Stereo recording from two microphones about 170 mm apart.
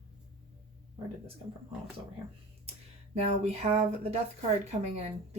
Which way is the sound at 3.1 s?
40° right (ahead or behind).